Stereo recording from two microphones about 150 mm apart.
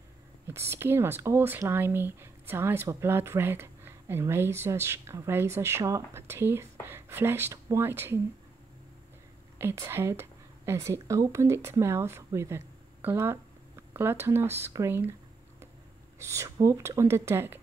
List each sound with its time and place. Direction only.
0.5 s speech: 15° right (ahead or behind)
9.6 s speech: 15° right (ahead or behind)
16.2 s speech: 20° right (ahead or behind)